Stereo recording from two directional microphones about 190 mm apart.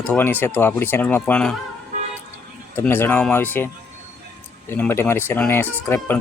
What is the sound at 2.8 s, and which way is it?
Speech, 10° left (ahead or behind).